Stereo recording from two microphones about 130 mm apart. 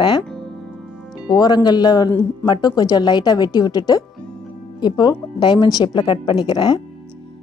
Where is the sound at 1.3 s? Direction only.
30° left (ahead or behind).